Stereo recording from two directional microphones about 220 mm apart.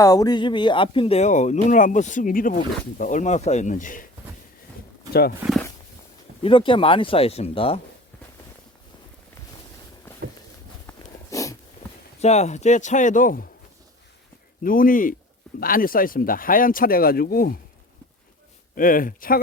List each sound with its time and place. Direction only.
0.0 s speech: 15° left (ahead or behind); by 4.0 s 35° left (ahead or behind)
6.4 s speech: 25° left (ahead or behind)
10.8 s a sound: 15° left (ahead or behind)
12.2 s speech: 30° left (ahead or behind)
14.6 s speech: 40° left (ahead or behind)
18.7 s speech: 40° left (ahead or behind)